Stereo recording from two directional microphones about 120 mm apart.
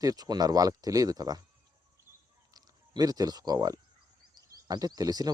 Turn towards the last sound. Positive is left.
turn(degrees=-30)  # may be behind; listen again after turning